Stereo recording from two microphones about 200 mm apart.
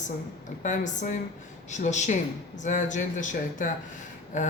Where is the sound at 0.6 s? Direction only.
40° left (ahead or behind).